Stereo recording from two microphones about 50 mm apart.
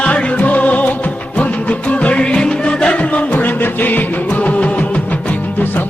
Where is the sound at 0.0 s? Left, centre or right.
Left.